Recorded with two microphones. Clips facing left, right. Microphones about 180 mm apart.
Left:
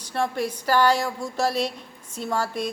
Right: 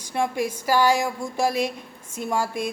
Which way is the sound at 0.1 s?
10° right (ahead or behind).